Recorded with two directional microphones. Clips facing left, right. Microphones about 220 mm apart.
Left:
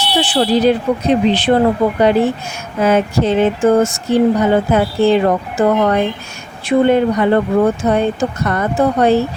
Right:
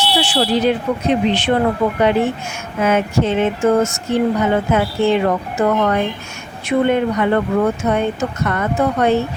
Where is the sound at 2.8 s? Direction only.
35° left (ahead or behind).